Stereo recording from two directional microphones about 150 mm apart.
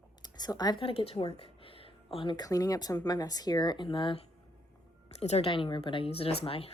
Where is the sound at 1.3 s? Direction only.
40° left (ahead or behind).